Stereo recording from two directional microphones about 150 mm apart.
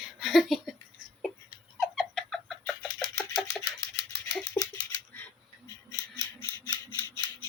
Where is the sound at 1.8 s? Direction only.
Centre (ahead or behind).